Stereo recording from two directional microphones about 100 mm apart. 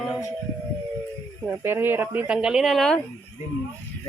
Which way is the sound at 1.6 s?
20° right (ahead or behind).